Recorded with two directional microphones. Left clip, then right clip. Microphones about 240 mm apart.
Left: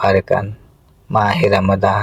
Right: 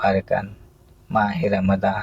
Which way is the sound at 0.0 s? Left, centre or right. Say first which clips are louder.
Left 6 dB; left.